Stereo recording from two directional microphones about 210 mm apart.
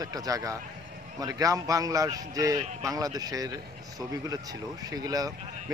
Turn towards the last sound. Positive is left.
turn(degrees=-15)  # may be behind; listen again after turning